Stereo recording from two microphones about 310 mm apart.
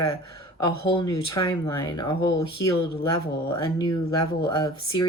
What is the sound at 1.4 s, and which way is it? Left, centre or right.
Speech, centre.